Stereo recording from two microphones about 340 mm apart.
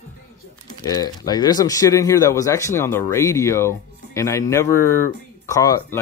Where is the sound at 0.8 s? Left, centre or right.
Centre.